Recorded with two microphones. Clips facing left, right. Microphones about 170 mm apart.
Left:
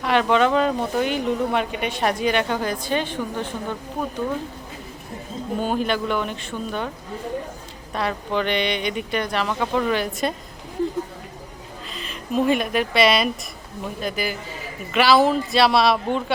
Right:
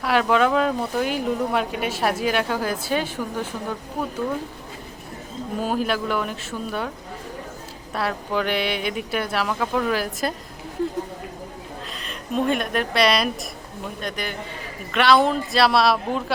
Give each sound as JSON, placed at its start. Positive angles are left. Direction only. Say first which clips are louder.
{"t": 0.0, "sound": "speech", "louder": "left 1 dB", "side_deg": -5}
{"t": 5.5, "sound": "speech", "louder": "left 1 dB", "side_deg": -5}
{"t": 7.9, "sound": "speech", "louder": "left 1 dB", "side_deg": -5}
{"t": 11.9, "sound": "speech", "louder": "left 3 dB", "side_deg": 0}